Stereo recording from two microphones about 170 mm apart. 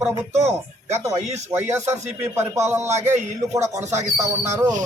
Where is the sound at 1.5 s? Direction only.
15° right (ahead or behind).